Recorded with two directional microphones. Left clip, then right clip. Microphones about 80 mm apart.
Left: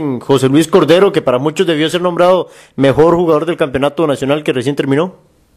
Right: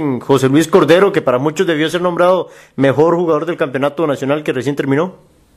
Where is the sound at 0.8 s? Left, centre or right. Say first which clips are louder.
Left 1 dB; left.